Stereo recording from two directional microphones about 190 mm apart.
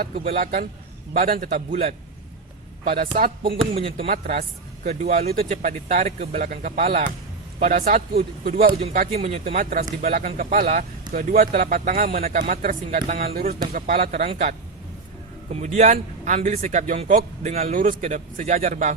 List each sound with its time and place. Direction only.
0.3 s speech: 50° right (ahead or behind)
3.1 s speech: 45° right (ahead or behind)
3.4 s speech: 30° right (ahead or behind)
4.1 s speech: 45° right (ahead or behind)
8.8 s speech: 35° right (ahead or behind)
12.0 s speech: 35° right (ahead or behind)
14.0 s speech: 35° right (ahead or behind)